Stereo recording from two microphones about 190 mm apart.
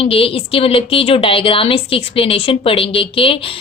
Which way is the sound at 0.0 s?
30° left (ahead or behind).